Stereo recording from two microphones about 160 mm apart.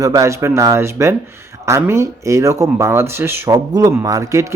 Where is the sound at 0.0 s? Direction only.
20° right (ahead or behind).